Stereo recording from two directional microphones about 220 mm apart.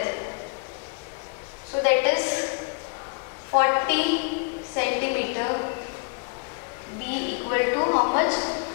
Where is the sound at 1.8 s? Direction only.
15° left (ahead or behind).